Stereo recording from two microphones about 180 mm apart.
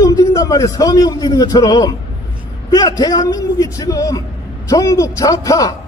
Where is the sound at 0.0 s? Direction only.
15° left (ahead or behind).